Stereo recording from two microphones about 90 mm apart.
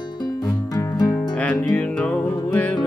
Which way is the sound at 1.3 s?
15° left (ahead or behind).